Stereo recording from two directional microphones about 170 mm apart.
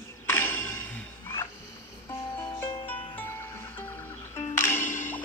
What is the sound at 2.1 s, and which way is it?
Music, 25° left (ahead or behind).